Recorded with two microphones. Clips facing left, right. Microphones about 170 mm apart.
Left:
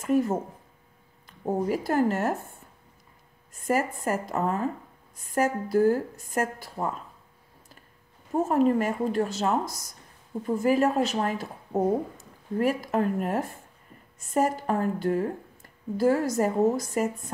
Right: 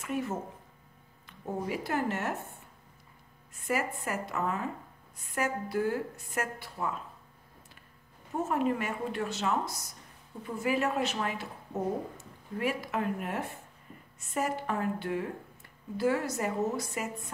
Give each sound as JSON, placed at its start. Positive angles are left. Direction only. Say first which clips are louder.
{"t": 0.0, "sound": "speech", "louder": "left 9 dB", "side_deg": 40}
{"t": 3.6, "sound": "speech", "louder": "left 6 dB", "side_deg": 40}
{"t": 8.5, "sound": "speech", "louder": "left 7 dB", "side_deg": 40}